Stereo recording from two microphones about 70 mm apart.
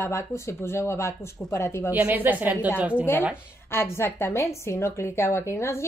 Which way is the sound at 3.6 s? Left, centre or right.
Left.